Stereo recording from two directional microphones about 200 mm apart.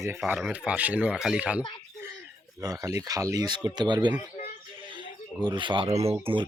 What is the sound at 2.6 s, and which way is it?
Speech, 15° right (ahead or behind).